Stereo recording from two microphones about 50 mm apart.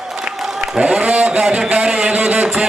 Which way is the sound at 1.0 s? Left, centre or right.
Right.